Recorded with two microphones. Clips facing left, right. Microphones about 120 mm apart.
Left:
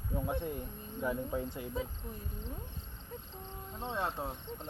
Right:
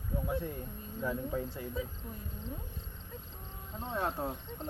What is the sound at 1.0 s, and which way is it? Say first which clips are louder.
Speech: even; 20° left (ahead or behind).